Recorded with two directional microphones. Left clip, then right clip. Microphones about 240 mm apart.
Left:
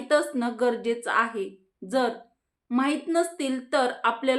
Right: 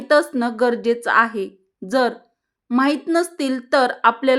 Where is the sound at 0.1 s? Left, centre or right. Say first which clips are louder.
Right 7 dB; right.